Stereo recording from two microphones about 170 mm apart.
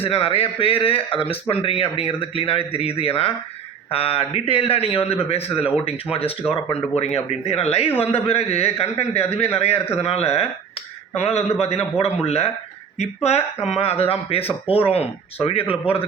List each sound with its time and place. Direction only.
0.0 s speech: 35° left (ahead or behind)